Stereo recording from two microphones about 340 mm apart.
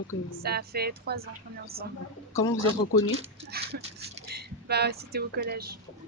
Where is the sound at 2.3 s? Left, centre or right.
Left.